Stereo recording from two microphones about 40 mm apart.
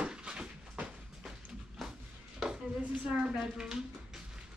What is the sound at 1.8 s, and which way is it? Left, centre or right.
Music, centre.